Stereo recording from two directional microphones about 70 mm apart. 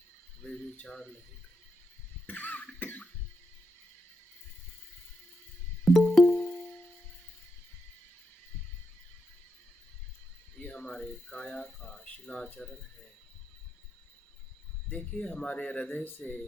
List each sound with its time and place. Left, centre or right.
0.4 s speech: centre
2.2 s cough: left
5.9 s music: centre
6.2 s music: centre
10.6 s a sound: centre
11.9 s speech: left
14.8 s speech: centre